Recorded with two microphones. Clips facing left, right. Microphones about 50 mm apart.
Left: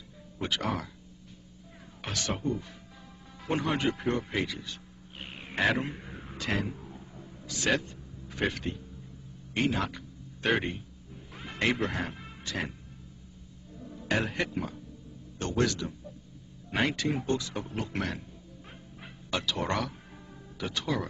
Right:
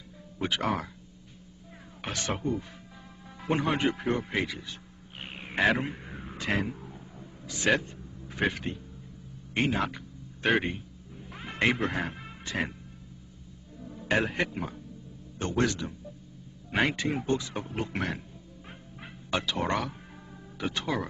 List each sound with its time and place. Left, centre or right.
0.4 s speech: right
2.3 s speech: centre
3.4 s speech: right
3.9 s speech: centre
5.2 s a sound: centre
6.3 s speech: centre
6.7 s a sound: centre
7.4 s a man's voice: centre
9.5 s a sound: right
10.5 s speech: centre
12.4 s speech: right
13.7 s music: centre
14.0 s a man's voice: right
19.3 s speech: right